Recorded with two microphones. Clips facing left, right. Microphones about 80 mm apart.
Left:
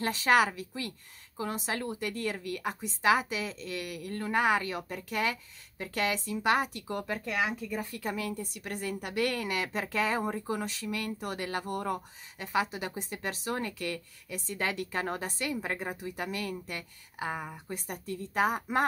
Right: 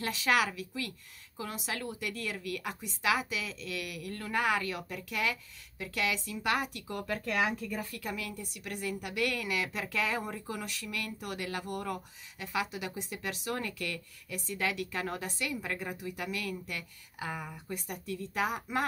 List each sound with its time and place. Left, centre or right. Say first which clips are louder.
0.0 s a woman's voice: left 4 dB; left
7.1 s speech: right 2 dB; centre
8.0 s a woman's voice: left 4 dB; left